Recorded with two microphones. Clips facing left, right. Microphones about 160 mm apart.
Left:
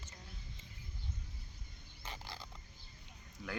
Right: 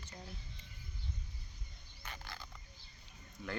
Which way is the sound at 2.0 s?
30° left (ahead or behind).